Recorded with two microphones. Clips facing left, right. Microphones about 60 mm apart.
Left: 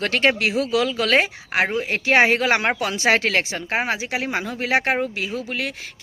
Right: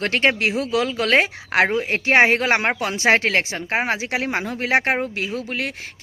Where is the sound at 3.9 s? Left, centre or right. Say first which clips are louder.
Right 2 dB; right.